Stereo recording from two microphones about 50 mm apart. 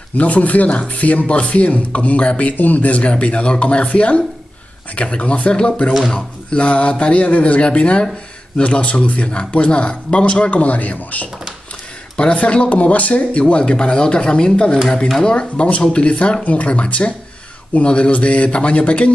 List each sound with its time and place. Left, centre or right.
0.1 s speech: left
12.2 s speech: left